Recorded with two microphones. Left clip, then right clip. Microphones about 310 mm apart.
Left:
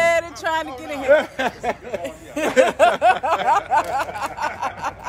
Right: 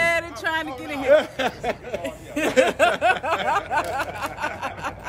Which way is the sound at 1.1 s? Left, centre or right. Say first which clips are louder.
Left 1 dB; left.